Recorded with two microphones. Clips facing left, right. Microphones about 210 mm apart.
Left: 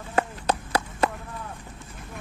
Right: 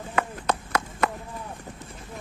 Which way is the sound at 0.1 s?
30° left (ahead or behind).